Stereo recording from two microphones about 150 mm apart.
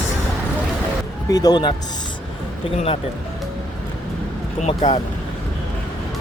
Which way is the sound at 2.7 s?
40° left (ahead or behind).